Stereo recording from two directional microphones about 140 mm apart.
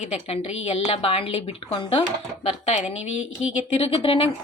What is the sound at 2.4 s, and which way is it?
A woman's voice, 50° left (ahead or behind).